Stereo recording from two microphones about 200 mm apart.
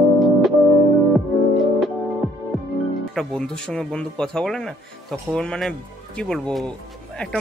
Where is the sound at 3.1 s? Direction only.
5° left (ahead or behind).